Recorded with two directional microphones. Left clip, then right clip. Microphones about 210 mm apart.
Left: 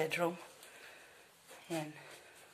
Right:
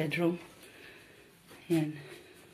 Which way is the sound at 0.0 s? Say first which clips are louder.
Right 3 dB; 10° left (ahead or behind).